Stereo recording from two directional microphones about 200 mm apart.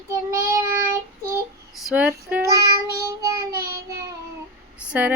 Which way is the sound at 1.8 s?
5° right (ahead or behind).